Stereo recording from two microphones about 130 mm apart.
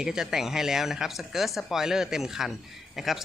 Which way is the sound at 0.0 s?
5° right (ahead or behind).